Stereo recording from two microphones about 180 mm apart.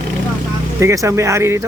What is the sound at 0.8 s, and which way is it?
Speech, 15° right (ahead or behind).